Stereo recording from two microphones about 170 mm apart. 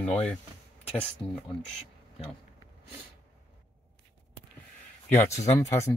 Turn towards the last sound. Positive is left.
turn(degrees=15)  # may be behind; listen again after turning